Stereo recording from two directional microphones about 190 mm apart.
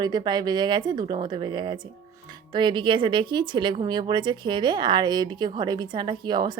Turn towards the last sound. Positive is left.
turn(degrees=-25)  # may be behind; listen again after turning